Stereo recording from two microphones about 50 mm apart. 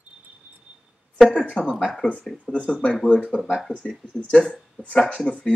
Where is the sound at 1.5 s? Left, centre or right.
Left.